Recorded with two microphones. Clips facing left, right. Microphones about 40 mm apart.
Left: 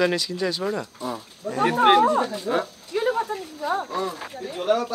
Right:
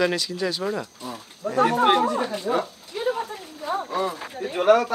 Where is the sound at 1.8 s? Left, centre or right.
Centre.